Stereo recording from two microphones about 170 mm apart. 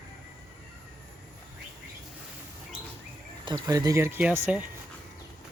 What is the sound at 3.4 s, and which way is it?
Speech, 20° right (ahead or behind).